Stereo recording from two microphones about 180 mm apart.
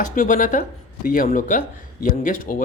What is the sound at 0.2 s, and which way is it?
Speech, 45° left (ahead or behind).